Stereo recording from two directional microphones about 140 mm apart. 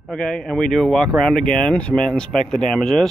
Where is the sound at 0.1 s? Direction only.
5° left (ahead or behind).